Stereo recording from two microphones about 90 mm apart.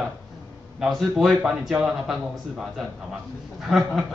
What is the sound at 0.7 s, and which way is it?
Speech, centre (ahead or behind).